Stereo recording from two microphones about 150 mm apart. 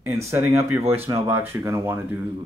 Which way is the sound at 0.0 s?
20° right (ahead or behind).